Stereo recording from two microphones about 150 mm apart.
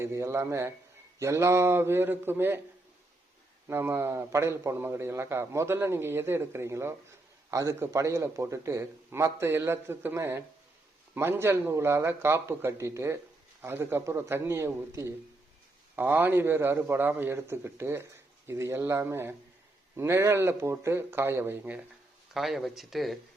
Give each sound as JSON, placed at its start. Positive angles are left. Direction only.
{"t": 0.0, "sound": "a man's voice", "side_deg": -15}
{"t": 3.7, "sound": "a man's voice", "side_deg": -15}
{"t": 22.4, "sound": "speech", "side_deg": 0}